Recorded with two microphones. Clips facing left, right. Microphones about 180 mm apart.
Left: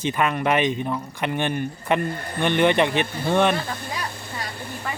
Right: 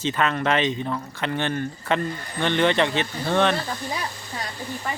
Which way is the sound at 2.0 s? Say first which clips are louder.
Left 2 dB; 55° left (ahead or behind).